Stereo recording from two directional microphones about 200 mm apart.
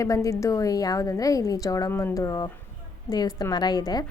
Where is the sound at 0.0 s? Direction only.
15° left (ahead or behind).